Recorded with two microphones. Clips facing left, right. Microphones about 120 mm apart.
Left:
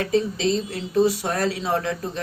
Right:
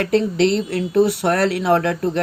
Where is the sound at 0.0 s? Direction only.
65° right (ahead or behind).